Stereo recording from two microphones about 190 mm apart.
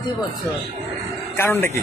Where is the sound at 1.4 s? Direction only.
10° left (ahead or behind).